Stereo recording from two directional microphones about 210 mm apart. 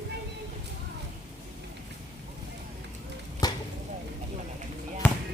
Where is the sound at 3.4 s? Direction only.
20° left (ahead or behind).